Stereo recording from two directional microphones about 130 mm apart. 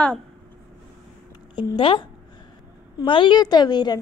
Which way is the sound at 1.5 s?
40° left (ahead or behind).